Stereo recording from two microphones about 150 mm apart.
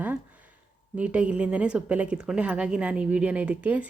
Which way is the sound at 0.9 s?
10° right (ahead or behind).